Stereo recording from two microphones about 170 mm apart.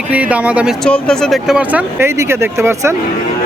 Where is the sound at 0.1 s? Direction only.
10° right (ahead or behind).